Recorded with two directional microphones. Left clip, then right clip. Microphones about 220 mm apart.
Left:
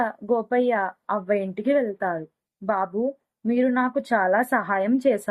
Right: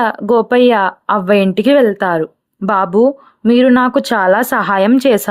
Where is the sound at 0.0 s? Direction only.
50° right (ahead or behind).